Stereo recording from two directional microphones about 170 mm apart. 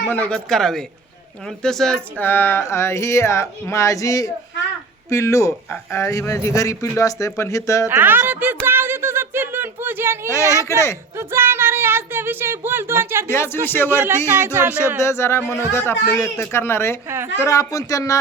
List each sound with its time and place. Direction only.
0.1 s speech: 10° left (ahead or behind)
7.9 s speech: 10° right (ahead or behind)
10.2 s speech: 20° left (ahead or behind)
11.2 s speech: 15° right (ahead or behind)
13.3 s speech: 15° left (ahead or behind)
14.3 s speech: 15° right (ahead or behind)
15.0 s speech: 15° left (ahead or behind)